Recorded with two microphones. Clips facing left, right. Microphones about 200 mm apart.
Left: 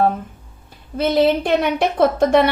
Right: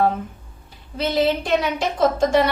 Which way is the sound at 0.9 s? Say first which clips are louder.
Left 4 dB; 55° left (ahead or behind).